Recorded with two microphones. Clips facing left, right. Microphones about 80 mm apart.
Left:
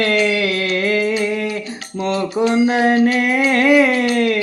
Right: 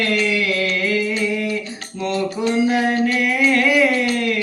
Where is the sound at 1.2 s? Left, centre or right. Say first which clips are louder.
Left 2 dB; left.